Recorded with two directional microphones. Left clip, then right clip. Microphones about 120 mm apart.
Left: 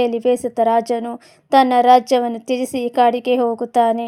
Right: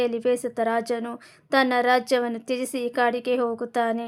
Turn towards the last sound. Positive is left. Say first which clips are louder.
# left 9 dB
turn(degrees=30)  # may be behind; listen again after turning